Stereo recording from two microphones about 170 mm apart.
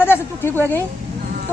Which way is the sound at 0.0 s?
15° left (ahead or behind).